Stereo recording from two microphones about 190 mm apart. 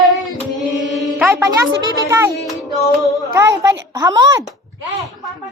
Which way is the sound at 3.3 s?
15° right (ahead or behind).